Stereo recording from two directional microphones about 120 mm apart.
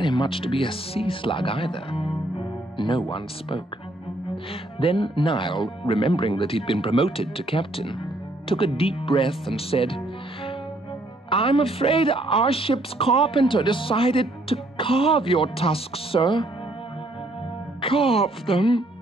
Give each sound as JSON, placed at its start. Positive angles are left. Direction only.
{"t": 0.0, "sound": "a woman's voice", "side_deg": 40}
{"t": 4.7, "sound": "a woman's voice", "side_deg": 45}
{"t": 9.5, "sound": "music", "side_deg": 50}
{"t": 11.2, "sound": "a woman's voice", "side_deg": 50}
{"t": 17.8, "sound": "a woman's voice", "side_deg": 50}